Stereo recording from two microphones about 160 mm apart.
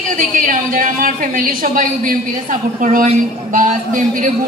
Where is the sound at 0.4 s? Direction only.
55° right (ahead or behind).